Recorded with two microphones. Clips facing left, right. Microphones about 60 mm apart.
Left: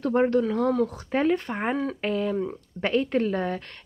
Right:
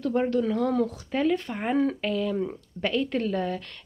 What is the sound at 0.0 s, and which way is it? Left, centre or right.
Speech, left.